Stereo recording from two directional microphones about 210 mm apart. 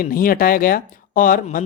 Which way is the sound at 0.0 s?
45° left (ahead or behind).